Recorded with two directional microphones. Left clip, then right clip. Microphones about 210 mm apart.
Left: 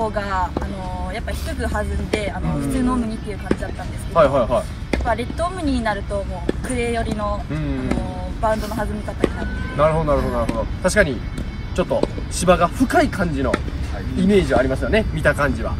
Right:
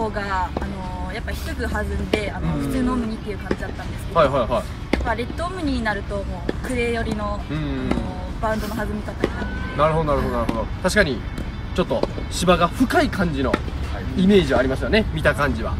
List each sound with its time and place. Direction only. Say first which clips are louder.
0.0 s speech: left 2 dB; centre (ahead or behind)
9.2 s run: left 3 dB; 35° right (ahead or behind)
9.8 s speech: left 2 dB; 5° right (ahead or behind)